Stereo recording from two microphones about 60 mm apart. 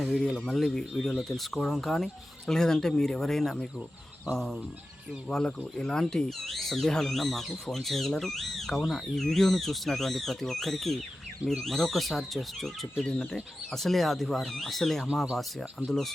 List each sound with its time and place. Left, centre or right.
0.3 s speech: centre
5.3 s speech: centre